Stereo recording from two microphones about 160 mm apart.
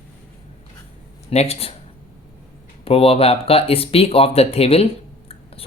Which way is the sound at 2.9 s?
35° left (ahead or behind).